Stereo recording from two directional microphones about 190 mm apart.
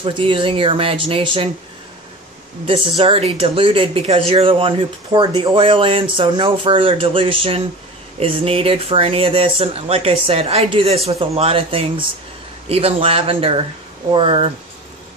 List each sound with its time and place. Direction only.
0.0 s speech: 25° right (ahead or behind)
3.0 s speech: 30° right (ahead or behind)